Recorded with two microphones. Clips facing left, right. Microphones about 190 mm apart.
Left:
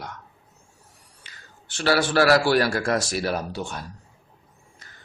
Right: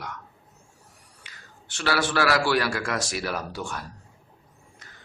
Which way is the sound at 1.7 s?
30° left (ahead or behind).